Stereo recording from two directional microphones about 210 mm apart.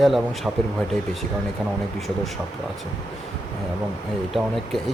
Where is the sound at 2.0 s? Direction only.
Centre (ahead or behind).